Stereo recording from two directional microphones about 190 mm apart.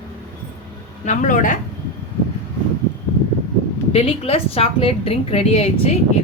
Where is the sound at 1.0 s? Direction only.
40° left (ahead or behind).